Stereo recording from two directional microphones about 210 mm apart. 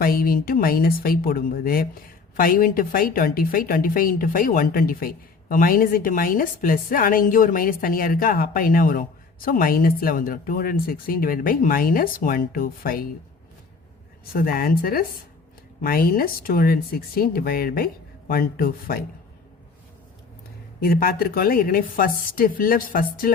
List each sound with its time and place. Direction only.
0.0 s a woman's voice: 45° left (ahead or behind)
14.4 s a woman's voice: 45° left (ahead or behind)
20.8 s a woman's voice: 45° left (ahead or behind)